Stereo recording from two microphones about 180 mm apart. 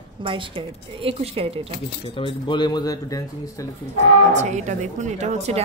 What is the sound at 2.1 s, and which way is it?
Speech, 25° left (ahead or behind).